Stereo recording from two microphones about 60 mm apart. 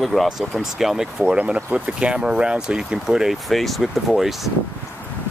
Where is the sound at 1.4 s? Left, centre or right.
Right; by 4.5 s centre.